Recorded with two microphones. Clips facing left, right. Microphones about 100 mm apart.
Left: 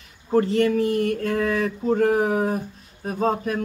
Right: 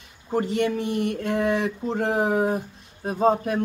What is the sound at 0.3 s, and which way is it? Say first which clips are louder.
Speech: left 4 dB; 20° right (ahead or behind).